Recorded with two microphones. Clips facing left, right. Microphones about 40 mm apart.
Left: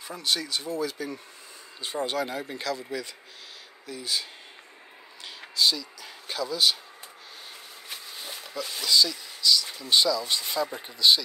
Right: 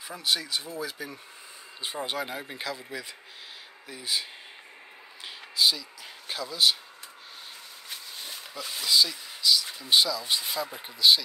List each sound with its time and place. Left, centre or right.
0.1 s speech: centre
3.8 s speech: centre
5.6 s speech: centre
7.9 s a sound: centre
8.5 s speech: centre